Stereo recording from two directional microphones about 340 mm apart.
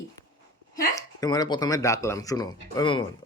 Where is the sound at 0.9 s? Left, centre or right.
Centre.